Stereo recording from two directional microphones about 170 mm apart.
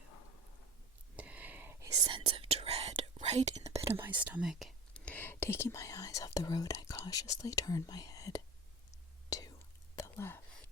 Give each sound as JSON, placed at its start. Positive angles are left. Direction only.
{"t": 1.1, "sound": "whispering", "side_deg": -10}
{"t": 3.9, "sound": "speech", "side_deg": -10}
{"t": 9.3, "sound": "whispering", "side_deg": 20}